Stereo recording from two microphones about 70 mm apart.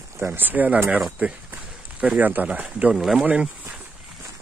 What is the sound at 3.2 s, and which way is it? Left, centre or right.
Speech, centre.